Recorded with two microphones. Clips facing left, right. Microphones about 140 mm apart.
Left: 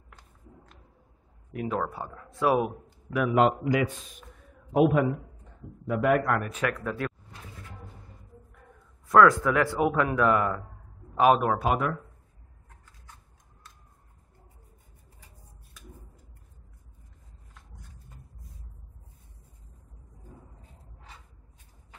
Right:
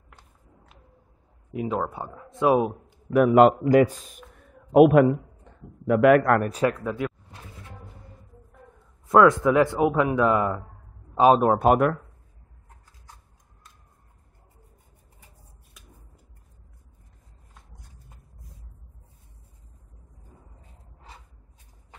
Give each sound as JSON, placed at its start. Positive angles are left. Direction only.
{"t": 1.5, "sound": "a man's voice", "side_deg": -20}
{"t": 3.1, "sound": "a man's voice", "side_deg": -50}
{"t": 4.8, "sound": "a man's voice", "side_deg": -70}
{"t": 6.5, "sound": "a man's voice", "side_deg": -25}
{"t": 9.0, "sound": "a man's voice", "side_deg": -20}
{"t": 11.1, "sound": "a man's voice", "side_deg": -30}
{"t": 11.5, "sound": "a man's voice", "side_deg": -50}